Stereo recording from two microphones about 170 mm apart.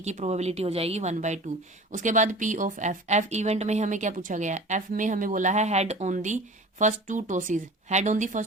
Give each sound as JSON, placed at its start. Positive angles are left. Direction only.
{"t": 0.0, "sound": "speech", "side_deg": -40}